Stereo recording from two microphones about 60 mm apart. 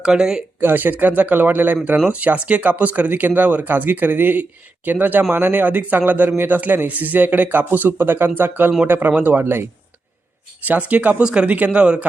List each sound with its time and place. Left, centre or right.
0.0 s speech: centre
0.6 s speech: right
9.4 s speech: right
10.7 s speech: right